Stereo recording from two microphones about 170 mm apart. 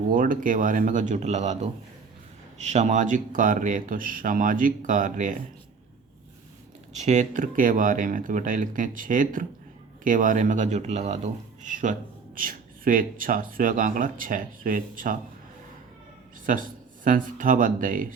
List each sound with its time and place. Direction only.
0.1 s speech: 55° right (ahead or behind)
2.6 s speech: 40° right (ahead or behind)
6.9 s speech: 40° right (ahead or behind)
16.5 s speech: 50° right (ahead or behind)